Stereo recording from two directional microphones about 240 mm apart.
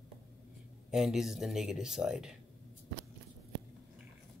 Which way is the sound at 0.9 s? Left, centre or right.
Centre.